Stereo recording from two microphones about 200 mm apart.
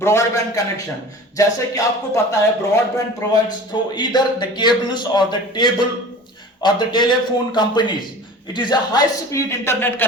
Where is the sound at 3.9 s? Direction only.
20° left (ahead or behind).